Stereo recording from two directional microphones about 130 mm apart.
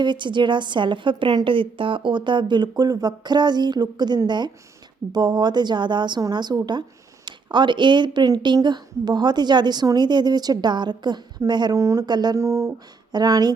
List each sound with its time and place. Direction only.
0.0 s a woman's voice: 35° right (ahead or behind); by 13.1 s 20° right (ahead or behind)
13.1 s a woman's voice: 30° right (ahead or behind)